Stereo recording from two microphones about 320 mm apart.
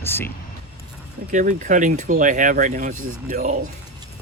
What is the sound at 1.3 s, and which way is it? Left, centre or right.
Speech, right.